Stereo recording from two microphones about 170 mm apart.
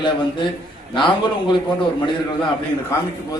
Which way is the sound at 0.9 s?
30° left (ahead or behind).